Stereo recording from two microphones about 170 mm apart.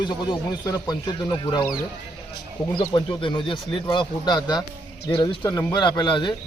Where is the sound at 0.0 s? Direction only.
25° left (ahead or behind).